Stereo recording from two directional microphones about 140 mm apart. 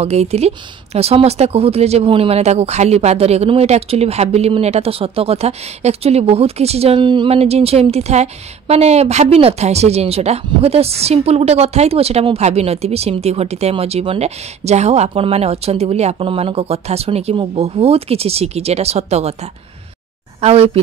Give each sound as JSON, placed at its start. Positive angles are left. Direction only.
{"t": 0.0, "sound": "speech", "side_deg": -50}
{"t": 20.3, "sound": "speech", "side_deg": -45}